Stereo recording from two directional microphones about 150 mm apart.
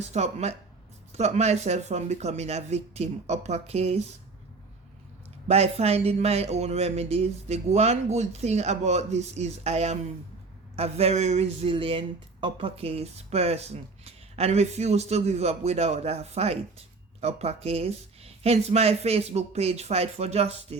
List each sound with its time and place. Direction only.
0.1 s speech: 50° right (ahead or behind)
5.5 s speech: 45° right (ahead or behind)